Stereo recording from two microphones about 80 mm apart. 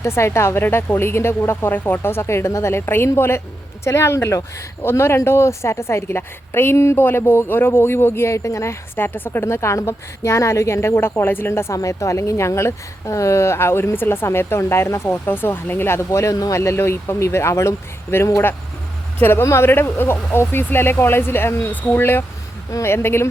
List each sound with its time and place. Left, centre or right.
0.0 s a woman's voice: left